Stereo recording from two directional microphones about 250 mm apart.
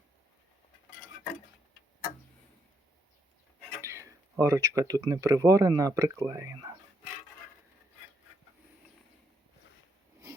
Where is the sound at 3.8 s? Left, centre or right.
Centre.